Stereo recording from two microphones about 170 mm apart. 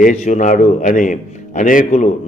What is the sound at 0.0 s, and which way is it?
A man's voice, 50° left (ahead or behind).